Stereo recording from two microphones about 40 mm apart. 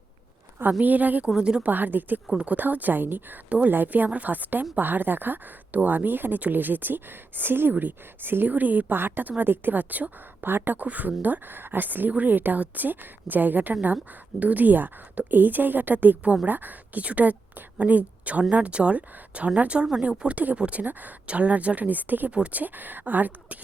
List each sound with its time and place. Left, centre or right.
0.8 s speech: right
1.4 s speech: right
1.6 s speech: right
7.7 s speech: right
8.4 s speech: right
9.0 s speech: right
10.8 s speech: right
16.2 s speech: right
16.5 s a woman's voice: right
22.3 s speech: right
22.6 s speech: right